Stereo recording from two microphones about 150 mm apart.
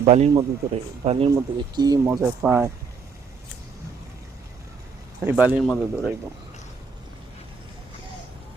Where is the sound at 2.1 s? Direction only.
15° right (ahead or behind).